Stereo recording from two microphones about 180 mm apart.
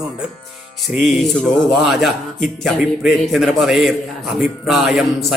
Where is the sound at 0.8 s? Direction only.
Centre (ahead or behind).